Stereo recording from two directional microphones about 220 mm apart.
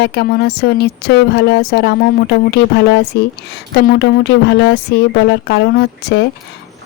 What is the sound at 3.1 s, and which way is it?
A woman's voice, 50° left (ahead or behind).